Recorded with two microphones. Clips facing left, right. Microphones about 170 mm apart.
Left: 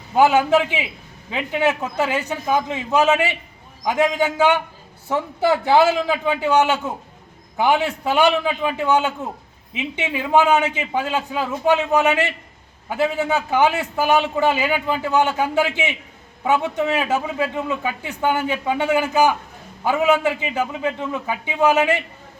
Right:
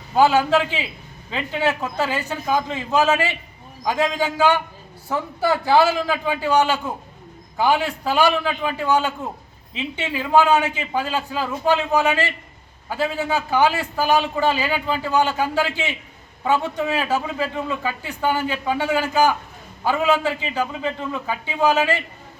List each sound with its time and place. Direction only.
0.2 s a man's voice: 15° left (ahead or behind)